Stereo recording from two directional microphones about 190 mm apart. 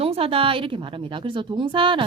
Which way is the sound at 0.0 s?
30° right (ahead or behind).